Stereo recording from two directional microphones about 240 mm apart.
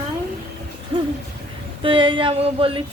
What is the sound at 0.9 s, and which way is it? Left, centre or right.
Hoot, centre.